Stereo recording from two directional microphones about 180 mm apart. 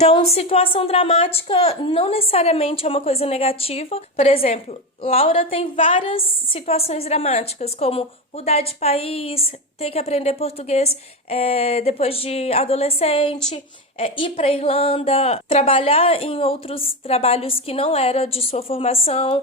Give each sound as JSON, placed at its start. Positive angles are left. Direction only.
{"t": 0.0, "sound": "a woman's voice", "side_deg": 35}